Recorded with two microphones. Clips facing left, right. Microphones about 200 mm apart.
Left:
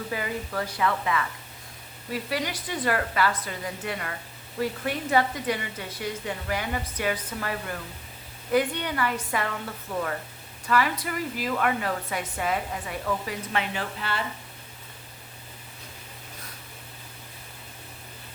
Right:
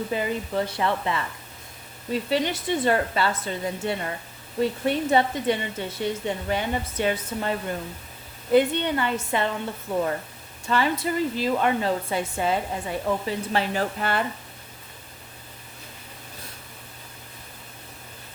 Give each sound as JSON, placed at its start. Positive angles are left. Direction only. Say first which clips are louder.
{"t": 0.1, "sound": "speech", "louder": "right 3 dB", "side_deg": -25}
{"t": 14.0, "sound": "speech", "louder": "right 4 dB", "side_deg": -50}